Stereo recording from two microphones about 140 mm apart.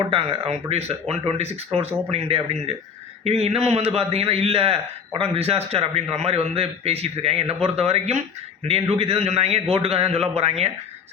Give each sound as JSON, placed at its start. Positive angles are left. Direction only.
{"t": 0.0, "sound": "a man's voice", "side_deg": -40}